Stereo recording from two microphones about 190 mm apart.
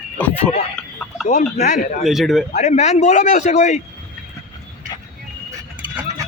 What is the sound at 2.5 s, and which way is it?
A man's voice, 35° left (ahead or behind).